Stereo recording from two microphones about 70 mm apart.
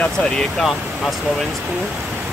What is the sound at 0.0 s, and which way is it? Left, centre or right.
Speech, centre.